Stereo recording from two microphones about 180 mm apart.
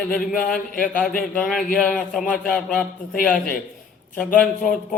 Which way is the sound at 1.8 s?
5° left (ahead or behind).